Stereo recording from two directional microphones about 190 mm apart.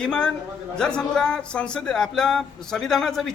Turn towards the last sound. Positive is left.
turn(degrees=0)  # may be behind; listen again after turning